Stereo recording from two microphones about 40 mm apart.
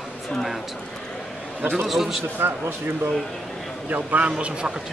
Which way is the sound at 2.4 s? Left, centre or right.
Right.